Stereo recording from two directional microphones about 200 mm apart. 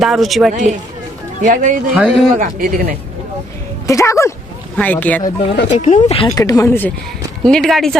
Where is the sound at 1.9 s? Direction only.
5° right (ahead or behind).